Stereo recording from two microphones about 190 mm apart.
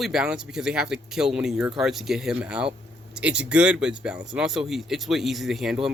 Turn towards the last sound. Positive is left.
turn(degrees=0)  # may be behind; listen again after turning